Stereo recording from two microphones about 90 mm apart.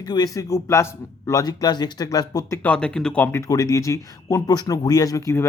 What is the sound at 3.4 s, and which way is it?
Speech, 40° left (ahead or behind).